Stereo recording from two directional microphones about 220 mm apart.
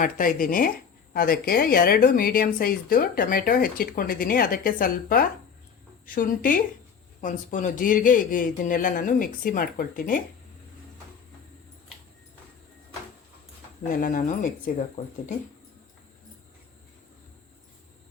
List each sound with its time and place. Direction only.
0.0 s speech: 40° left (ahead or behind)
14.0 s speech: 35° left (ahead or behind)